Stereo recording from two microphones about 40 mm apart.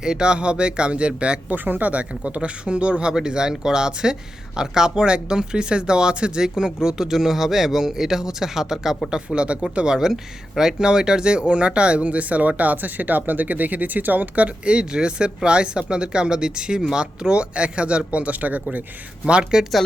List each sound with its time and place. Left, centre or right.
0.0 s speech: right
1.5 s speech: right; by 9.0 s centre
9.0 s speech: right
19.2 s speech: right